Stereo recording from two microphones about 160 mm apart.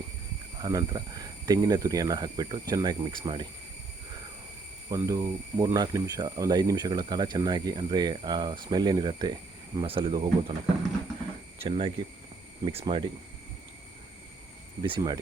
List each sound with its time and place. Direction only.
0.6 s speech: 25° right (ahead or behind)
4.9 s speech: 20° right (ahead or behind)
11.6 s speech: 35° right (ahead or behind)
14.8 s speech: 30° right (ahead or behind)